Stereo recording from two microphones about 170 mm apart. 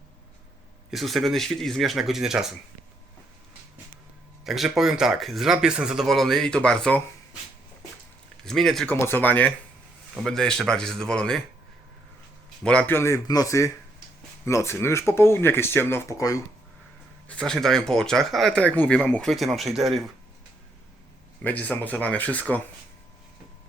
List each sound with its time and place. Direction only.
0.9 s speech: centre (ahead or behind)
4.4 s speech: centre (ahead or behind)
8.4 s speech: centre (ahead or behind)
12.6 s speech: 10° left (ahead or behind)
17.2 s speech: 5° left (ahead or behind)
21.4 s speech: 10° left (ahead or behind)